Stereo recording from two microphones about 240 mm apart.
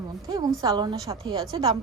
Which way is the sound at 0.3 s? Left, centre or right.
Centre.